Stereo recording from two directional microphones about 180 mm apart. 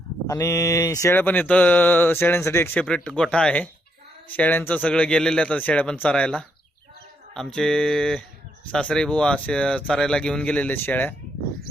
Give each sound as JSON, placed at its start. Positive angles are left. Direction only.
{"t": 0.3, "sound": "speech", "side_deg": 15}